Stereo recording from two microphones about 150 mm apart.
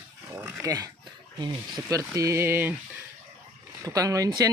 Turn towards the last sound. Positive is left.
turn(degrees=-20)  # may be behind; listen again after turning